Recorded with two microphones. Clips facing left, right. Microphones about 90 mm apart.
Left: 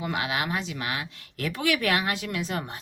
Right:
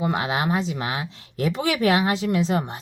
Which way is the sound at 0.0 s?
30° right (ahead or behind).